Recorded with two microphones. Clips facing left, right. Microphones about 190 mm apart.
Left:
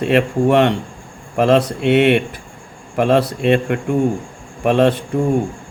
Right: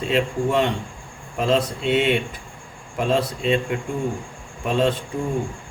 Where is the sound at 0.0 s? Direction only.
65° left (ahead or behind).